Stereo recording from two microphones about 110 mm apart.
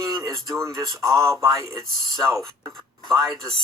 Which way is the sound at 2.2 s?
Centre (ahead or behind).